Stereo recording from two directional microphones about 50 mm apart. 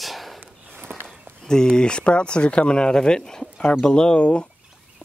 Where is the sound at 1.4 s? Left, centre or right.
Centre.